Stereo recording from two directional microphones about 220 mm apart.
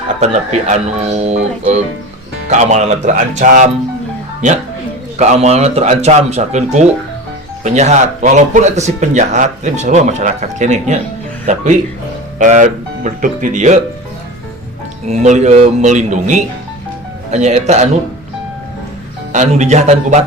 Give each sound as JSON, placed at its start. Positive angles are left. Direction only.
{"t": 0.2, "sound": "a man's voice", "side_deg": -30}
{"t": 15.0, "sound": "speech", "side_deg": -30}
{"t": 19.3, "sound": "speech", "side_deg": -35}